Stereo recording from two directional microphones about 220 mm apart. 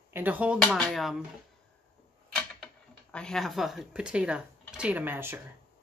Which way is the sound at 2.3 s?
5° left (ahead or behind).